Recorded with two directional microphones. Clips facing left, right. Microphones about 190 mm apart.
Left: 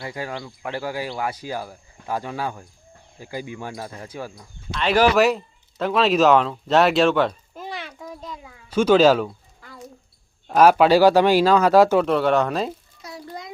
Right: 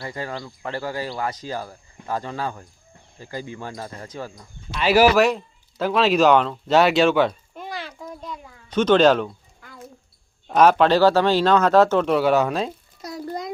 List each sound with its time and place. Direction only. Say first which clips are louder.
0.0 s speech: even; 10° left (ahead or behind)
4.7 s speech: right 2 dB; 5° right (ahead or behind)
7.9 s a sound: right 1 dB; centre (ahead or behind)
10.5 s speech: left 1 dB; 5° left (ahead or behind)
12.0 s speech: right 1 dB; 5° right (ahead or behind)
13.0 s a sound: right 6 dB; 40° right (ahead or behind)